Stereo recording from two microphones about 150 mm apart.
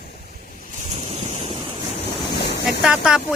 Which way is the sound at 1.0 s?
40° right (ahead or behind).